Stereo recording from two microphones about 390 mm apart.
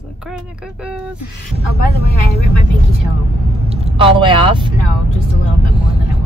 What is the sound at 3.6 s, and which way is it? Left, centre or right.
Speech, centre.